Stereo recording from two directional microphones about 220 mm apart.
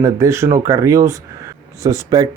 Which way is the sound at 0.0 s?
15° right (ahead or behind).